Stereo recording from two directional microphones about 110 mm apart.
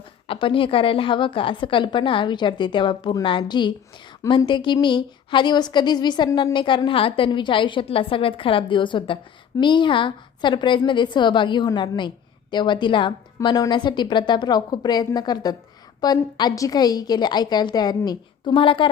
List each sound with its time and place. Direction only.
0.3 s a woman's voice: 50° left (ahead or behind)